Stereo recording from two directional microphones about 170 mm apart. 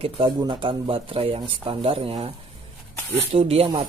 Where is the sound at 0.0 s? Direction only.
30° right (ahead or behind).